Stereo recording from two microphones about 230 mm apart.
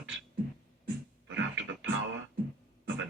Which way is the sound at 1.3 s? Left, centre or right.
Right.